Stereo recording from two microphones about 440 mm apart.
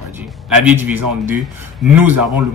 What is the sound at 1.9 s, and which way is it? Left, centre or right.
Speech, right.